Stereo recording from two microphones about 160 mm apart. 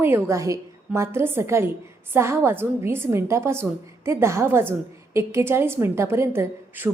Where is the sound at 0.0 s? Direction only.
15° right (ahead or behind).